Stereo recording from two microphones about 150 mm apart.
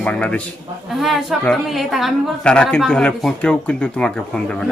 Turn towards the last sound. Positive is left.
turn(degrees=5)  # may be behind; listen again after turning